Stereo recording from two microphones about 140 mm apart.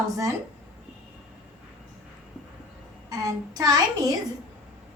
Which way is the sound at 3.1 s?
25° right (ahead or behind).